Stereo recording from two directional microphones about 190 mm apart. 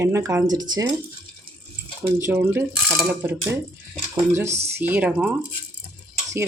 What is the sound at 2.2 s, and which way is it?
Speech, 10° right (ahead or behind).